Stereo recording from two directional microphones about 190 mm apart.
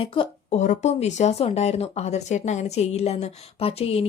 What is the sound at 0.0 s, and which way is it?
Speech, 30° left (ahead or behind).